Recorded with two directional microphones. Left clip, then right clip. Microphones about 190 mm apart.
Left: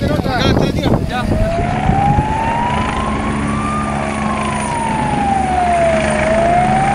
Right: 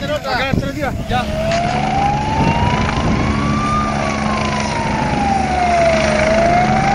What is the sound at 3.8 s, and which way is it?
Vehicle, 5° left (ahead or behind).